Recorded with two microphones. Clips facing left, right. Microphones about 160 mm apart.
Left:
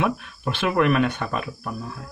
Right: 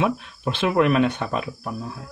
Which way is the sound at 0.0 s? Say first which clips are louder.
Right 1 dB; 20° right (ahead or behind).